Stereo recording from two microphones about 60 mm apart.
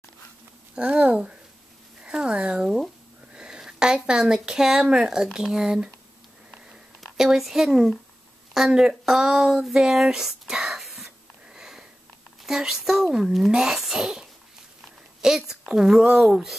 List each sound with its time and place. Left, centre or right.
0.7 s speech: right
7.2 s a woman's voice: centre
11.1 s wheeze: centre
12.4 s a woman's voice: centre
15.2 s speech: centre